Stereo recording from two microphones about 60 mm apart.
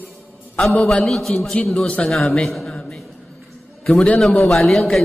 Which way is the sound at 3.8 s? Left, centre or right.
Centre.